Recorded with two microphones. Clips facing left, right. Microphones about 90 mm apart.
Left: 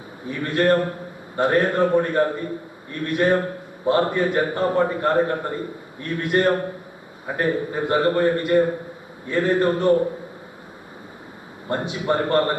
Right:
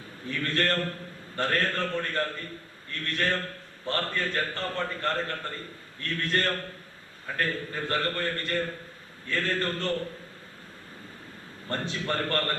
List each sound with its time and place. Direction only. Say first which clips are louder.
0.3 s a man's voice: left 9 dB; 15° left (ahead or behind)
11.7 s a man's voice: left 8 dB; 15° left (ahead or behind)